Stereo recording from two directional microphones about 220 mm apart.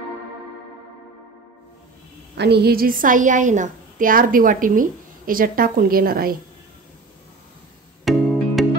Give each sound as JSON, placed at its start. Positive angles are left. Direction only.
{"t": 2.3, "sound": "a woman's voice", "side_deg": -50}
{"t": 8.0, "sound": "music", "side_deg": 0}